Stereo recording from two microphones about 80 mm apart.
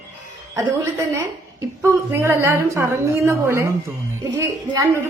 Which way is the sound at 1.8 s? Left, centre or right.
Right.